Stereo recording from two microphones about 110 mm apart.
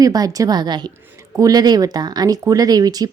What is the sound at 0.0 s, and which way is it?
Speech, 35° right (ahead or behind).